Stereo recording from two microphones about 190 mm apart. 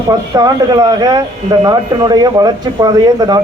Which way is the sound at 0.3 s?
20° right (ahead or behind).